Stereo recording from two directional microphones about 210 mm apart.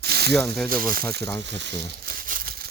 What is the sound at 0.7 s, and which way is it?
Speech, 45° right (ahead or behind).